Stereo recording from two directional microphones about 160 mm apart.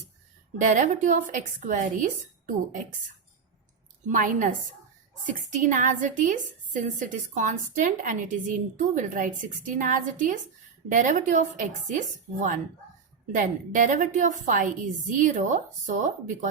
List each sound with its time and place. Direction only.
0.6 s a woman's voice: 55° right (ahead or behind)
4.1 s a woman's voice: 55° right (ahead or behind)